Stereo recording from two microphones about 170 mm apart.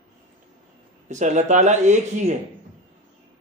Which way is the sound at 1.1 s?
45° right (ahead or behind).